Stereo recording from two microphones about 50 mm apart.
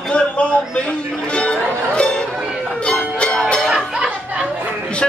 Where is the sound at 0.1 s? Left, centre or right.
Left.